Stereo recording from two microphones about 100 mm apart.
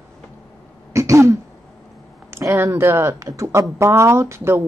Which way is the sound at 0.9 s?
30° right (ahead or behind).